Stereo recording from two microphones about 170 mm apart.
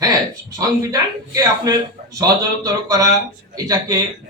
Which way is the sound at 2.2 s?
20° right (ahead or behind).